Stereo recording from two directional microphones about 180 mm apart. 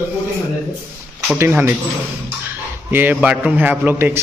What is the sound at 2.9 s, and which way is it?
A man's voice, 10° right (ahead or behind).